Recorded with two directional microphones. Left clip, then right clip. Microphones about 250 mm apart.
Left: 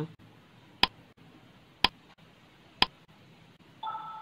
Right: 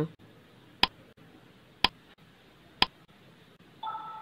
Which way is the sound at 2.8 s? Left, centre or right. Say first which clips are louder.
Even; centre.